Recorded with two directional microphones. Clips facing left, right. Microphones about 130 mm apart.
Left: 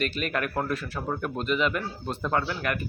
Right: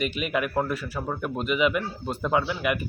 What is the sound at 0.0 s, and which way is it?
Speech, 10° right (ahead or behind).